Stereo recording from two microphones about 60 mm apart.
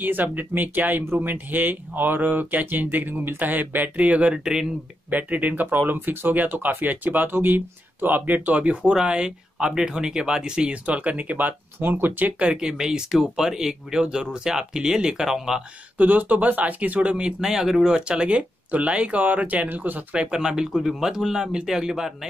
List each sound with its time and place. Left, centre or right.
0.0 s speech: right; by 4.7 s centre
5.1 s speech: right
12.4 s speech: centre
16.0 s speech: right
20.2 s speech: centre